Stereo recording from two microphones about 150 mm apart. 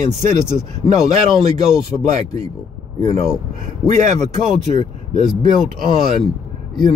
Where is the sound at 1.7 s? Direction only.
5° right (ahead or behind).